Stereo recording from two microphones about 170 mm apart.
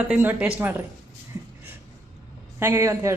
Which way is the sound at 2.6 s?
15° right (ahead or behind).